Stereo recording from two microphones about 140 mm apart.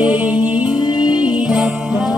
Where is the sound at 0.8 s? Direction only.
30° left (ahead or behind).